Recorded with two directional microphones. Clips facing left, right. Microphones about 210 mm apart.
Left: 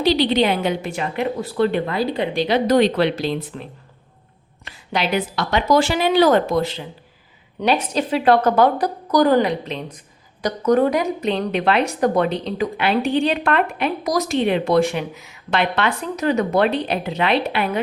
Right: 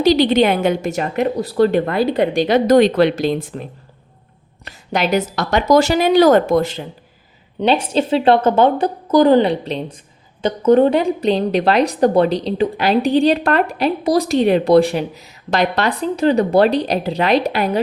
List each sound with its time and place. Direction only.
0.0 s a woman's voice: 45° right (ahead or behind)
4.6 s a woman's voice: 45° right (ahead or behind)
7.6 s a woman's voice: 25° right (ahead or behind)